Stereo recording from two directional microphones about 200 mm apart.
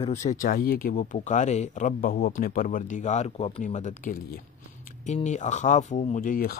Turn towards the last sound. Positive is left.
turn(degrees=45)  # may be behind; listen again after turning